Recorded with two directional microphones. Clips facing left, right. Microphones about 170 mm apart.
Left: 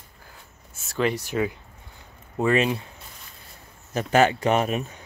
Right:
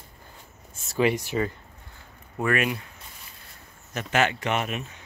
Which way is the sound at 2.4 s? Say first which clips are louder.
Left 4 dB; 25° left (ahead or behind).